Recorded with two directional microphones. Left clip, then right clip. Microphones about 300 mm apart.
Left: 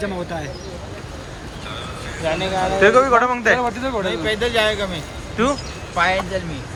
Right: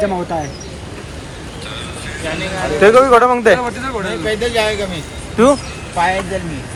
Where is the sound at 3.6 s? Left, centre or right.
Left.